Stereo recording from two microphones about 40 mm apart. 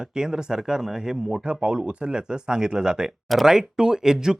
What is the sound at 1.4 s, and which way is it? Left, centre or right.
Speech, right.